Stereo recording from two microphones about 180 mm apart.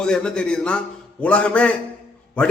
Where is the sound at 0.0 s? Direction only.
5° left (ahead or behind).